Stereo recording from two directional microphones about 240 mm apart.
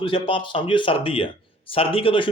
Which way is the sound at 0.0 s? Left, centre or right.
Left.